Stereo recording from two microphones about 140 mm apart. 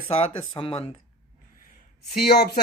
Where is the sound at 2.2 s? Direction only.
90° left.